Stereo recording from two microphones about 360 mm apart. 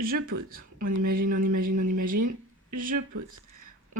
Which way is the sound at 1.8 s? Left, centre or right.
Right.